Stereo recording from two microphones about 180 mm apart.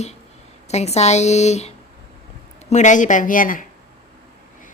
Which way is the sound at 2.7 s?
40° left (ahead or behind).